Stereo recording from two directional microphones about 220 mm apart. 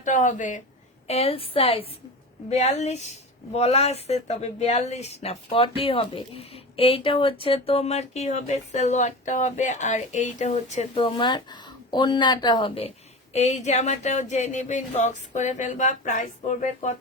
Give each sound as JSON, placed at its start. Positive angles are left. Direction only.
{"t": 0.0, "sound": "speech", "side_deg": 35}